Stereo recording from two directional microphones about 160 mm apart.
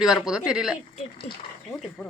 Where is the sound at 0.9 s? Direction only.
35° left (ahead or behind).